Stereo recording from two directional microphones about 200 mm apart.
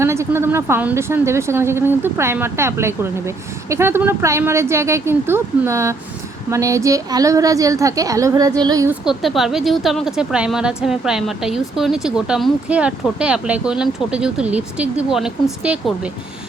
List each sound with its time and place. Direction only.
0.0 s a woman's voice: 15° right (ahead or behind)
9.0 s a woman's voice: centre (ahead or behind)